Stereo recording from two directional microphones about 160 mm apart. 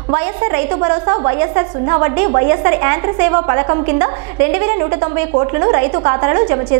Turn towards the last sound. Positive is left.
turn(degrees=-15)  # may be behind; listen again after turning